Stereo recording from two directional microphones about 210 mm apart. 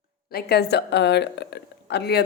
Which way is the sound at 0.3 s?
50° left (ahead or behind).